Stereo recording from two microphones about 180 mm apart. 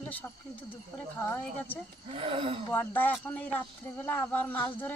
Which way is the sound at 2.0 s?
30° right (ahead or behind).